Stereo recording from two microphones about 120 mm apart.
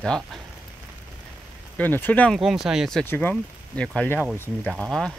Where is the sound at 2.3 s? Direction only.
Centre (ahead or behind).